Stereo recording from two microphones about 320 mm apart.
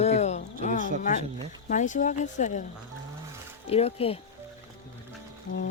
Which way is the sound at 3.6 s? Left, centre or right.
Centre.